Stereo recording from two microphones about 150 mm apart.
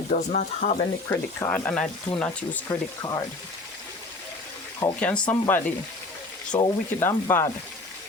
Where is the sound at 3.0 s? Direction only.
25° left (ahead or behind).